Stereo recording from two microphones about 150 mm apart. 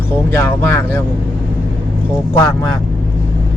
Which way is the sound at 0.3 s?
15° left (ahead or behind).